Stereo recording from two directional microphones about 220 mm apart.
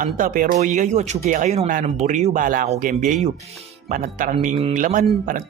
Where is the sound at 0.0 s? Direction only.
40° right (ahead or behind).